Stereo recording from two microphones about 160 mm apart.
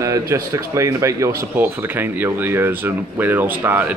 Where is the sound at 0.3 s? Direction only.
20° right (ahead or behind).